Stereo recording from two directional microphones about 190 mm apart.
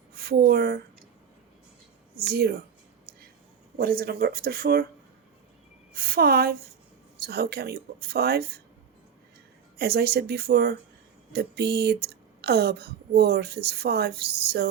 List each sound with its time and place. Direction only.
0.2 s speech: 55° right (ahead or behind)
2.2 s speech: 55° right (ahead or behind)
3.8 s speech: 50° right (ahead or behind)
5.9 s speech: 55° right (ahead or behind)
9.7 s speech: 55° right (ahead or behind)